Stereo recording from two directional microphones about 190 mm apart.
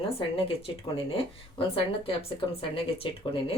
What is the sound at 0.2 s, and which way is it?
Speech, 30° left (ahead or behind).